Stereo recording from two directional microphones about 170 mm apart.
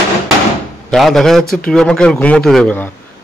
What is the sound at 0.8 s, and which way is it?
A man's voice, centre (ahead or behind).